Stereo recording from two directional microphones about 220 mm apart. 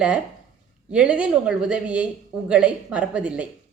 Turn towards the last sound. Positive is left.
turn(degrees=-5)  # may be behind; listen again after turning